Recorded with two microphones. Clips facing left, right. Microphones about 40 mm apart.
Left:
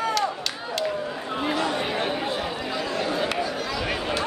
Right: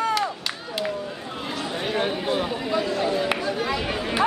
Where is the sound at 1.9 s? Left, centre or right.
Centre.